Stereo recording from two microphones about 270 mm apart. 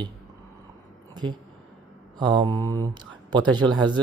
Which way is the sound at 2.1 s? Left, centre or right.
Centre.